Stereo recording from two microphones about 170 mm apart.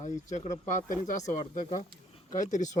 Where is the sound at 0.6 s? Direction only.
45° left (ahead or behind).